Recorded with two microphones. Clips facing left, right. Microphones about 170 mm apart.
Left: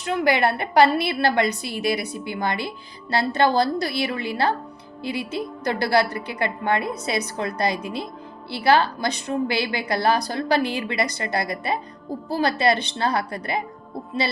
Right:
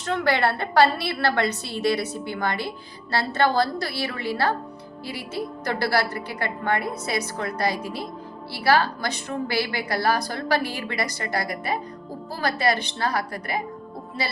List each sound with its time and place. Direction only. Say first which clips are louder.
0.0 s a woman's voice: left 2 dB; 15° left (ahead or behind)